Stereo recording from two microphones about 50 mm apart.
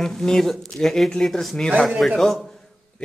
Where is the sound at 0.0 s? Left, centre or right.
Centre.